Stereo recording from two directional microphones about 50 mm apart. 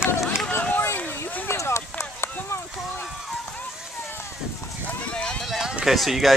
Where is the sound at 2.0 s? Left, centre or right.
Left.